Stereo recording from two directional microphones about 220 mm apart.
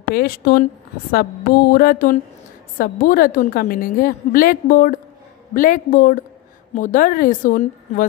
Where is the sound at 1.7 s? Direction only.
40° left (ahead or behind).